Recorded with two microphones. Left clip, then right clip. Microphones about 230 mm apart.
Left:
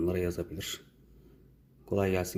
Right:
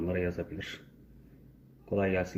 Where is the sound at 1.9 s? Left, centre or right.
Left.